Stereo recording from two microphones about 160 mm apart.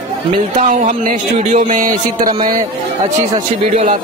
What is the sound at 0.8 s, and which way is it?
Speech, 50° right (ahead or behind).